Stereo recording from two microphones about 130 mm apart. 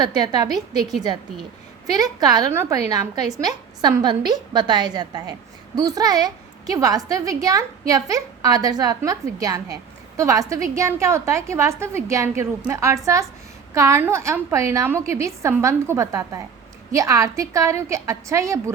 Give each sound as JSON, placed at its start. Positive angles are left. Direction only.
{"t": 0.0, "sound": "a woman's voice", "side_deg": -30}